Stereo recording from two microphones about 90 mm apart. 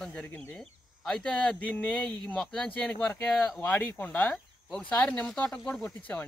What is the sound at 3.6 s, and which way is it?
Speech, 20° left (ahead or behind).